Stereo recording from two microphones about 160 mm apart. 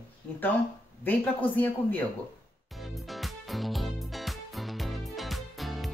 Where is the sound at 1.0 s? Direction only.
10° left (ahead or behind).